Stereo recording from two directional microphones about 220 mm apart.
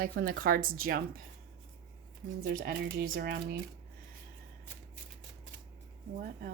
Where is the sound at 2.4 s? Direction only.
45° right (ahead or behind).